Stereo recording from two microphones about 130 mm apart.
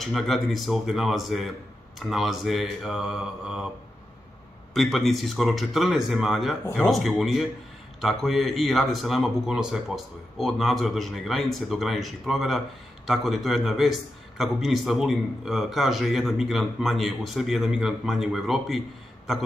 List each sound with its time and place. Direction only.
0.0 s speech: centre (ahead or behind)
4.7 s speech: centre (ahead or behind)